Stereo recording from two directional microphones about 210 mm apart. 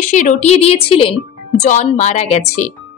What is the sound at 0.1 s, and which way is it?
A woman's voice, 35° left (ahead or behind).